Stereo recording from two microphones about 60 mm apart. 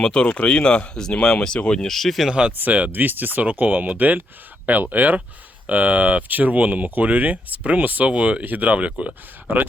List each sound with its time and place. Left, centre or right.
0.0 s speech: centre
2.6 s speech: right